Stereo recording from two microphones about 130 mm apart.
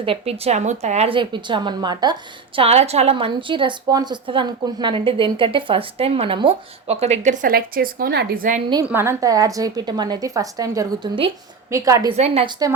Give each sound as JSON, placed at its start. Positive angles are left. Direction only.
{"t": 0.0, "sound": "a woman's voice", "side_deg": -45}
{"t": 1.1, "sound": "a woman's voice", "side_deg": -40}
{"t": 2.6, "sound": "a woman's voice", "side_deg": -55}
{"t": 7.0, "sound": "a woman's voice", "side_deg": -65}
{"t": 8.9, "sound": "a woman's voice", "side_deg": -20}
{"t": 12.1, "sound": "a woman's voice", "side_deg": -55}
{"t": 12.5, "sound": "a woman's voice", "side_deg": -30}